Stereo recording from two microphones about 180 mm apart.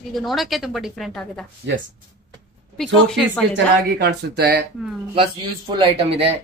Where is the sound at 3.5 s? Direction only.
70° right (ahead or behind).